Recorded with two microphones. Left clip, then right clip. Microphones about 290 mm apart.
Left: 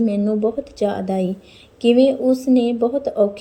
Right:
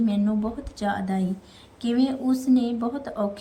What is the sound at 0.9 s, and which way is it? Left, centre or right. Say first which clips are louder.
Speech: left 2 dB; left.